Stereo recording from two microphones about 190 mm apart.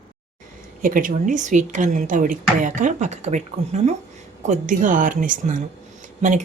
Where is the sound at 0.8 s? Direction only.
45° right (ahead or behind).